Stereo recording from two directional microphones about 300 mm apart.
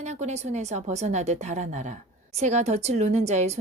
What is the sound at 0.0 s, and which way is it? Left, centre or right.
Speech, right.